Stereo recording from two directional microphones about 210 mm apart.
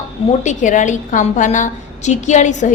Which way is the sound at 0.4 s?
35° left (ahead or behind).